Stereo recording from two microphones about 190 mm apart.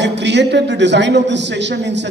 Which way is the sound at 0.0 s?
65° right (ahead or behind).